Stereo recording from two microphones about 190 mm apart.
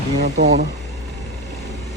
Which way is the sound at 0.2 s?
65° right (ahead or behind).